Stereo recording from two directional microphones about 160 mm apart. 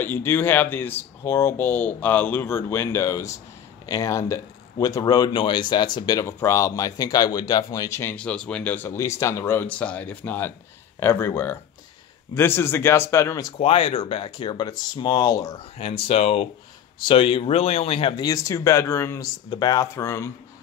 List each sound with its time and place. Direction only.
0.0 s speech: 15° left (ahead or behind)
13.6 s speech: 35° left (ahead or behind)
15.8 s speech: 40° left (ahead or behind); by 20.2 s 15° left (ahead or behind)